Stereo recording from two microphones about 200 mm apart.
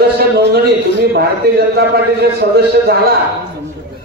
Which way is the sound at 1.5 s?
50° right (ahead or behind).